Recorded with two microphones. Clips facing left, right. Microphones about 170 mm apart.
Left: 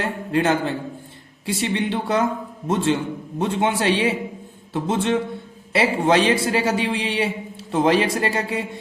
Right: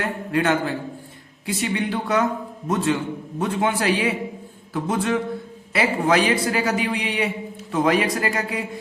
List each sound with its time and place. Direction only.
0.0 s a man's voice: 30° left (ahead or behind)